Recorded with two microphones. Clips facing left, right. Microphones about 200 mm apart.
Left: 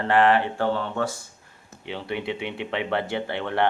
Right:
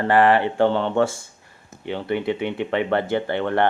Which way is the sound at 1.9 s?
Centre (ahead or behind).